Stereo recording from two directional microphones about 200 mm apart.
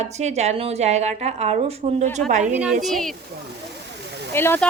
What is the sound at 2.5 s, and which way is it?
Speech, 5° right (ahead or behind).